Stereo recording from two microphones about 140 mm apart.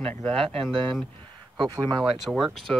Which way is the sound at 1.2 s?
30° right (ahead or behind).